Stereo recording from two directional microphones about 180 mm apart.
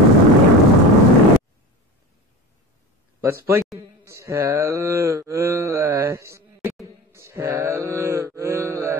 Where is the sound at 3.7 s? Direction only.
15° right (ahead or behind).